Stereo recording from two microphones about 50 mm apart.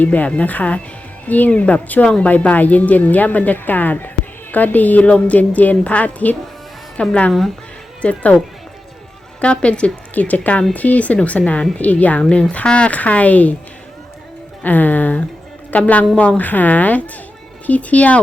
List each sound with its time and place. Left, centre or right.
0.0 s speech: left
9.4 s speech: left
14.6 s speech: left